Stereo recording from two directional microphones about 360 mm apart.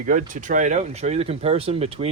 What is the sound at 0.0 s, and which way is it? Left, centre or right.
Speech, right.